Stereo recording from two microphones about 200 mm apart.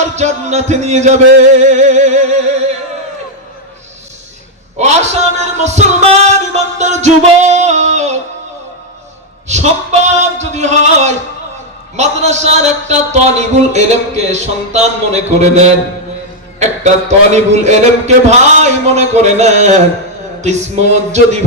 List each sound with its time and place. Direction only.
0.0 s speech: 35° right (ahead or behind)
4.8 s speech: 35° right (ahead or behind)
9.5 s speech: 35° right (ahead or behind)